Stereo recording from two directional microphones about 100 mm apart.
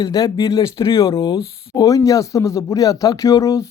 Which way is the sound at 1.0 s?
55° left (ahead or behind).